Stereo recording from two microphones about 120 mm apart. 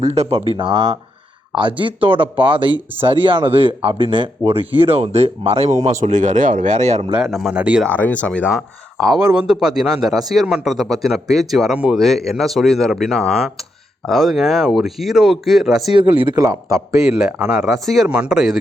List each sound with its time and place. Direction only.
0.0 s speech: 60° right (ahead or behind)
6.0 s speech: 90° right; by 7.1 s 70° right (ahead or behind)
7.3 s speech: 5° right (ahead or behind)
7.9 s speech: 15° left (ahead or behind)
9.1 s a man's voice: 5° right (ahead or behind)
16.2 s a man's voice: 30° right (ahead or behind)
17.0 s a man's voice: 5° right (ahead or behind)